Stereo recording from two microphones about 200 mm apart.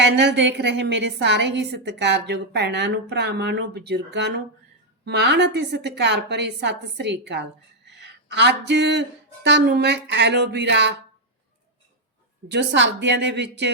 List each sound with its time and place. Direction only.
0.0 s a woman's voice: 60° right (ahead or behind)
12.5 s a woman's voice: 60° right (ahead or behind)